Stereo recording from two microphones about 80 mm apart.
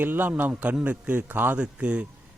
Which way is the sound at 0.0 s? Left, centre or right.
Right.